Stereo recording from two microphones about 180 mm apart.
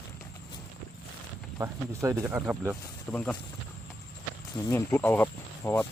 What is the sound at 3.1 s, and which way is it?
Speech, 10° left (ahead or behind).